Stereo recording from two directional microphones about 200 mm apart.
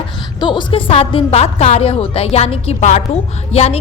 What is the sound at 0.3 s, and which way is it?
A woman's voice, 25° left (ahead or behind).